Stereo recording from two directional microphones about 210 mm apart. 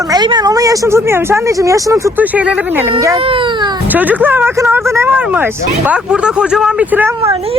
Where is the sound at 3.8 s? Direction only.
10° right (ahead or behind).